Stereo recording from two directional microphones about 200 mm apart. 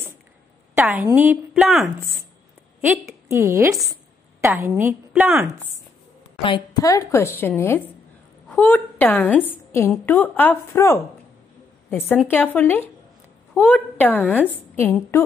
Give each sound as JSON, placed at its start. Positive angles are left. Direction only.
{"t": 0.7, "sound": "a woman's voice", "side_deg": -10}
{"t": 6.4, "sound": "a woman's voice", "side_deg": 20}